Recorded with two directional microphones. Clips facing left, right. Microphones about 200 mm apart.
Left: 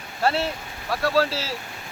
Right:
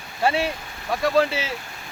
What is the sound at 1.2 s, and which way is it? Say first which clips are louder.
Speech: right 2 dB; 15° right (ahead or behind).